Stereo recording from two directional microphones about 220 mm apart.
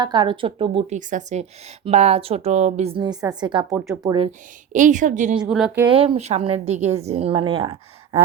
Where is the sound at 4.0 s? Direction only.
20° right (ahead or behind).